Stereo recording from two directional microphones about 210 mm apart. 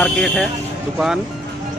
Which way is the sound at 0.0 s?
5° left (ahead or behind).